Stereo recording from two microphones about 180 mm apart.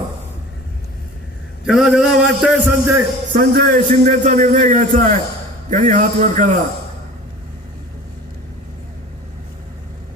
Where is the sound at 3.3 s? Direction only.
50° right (ahead or behind).